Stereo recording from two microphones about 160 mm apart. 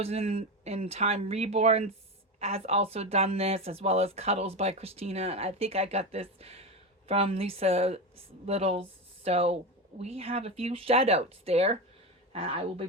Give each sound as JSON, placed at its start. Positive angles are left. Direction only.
{"t": 0.0, "sound": "speech", "side_deg": -40}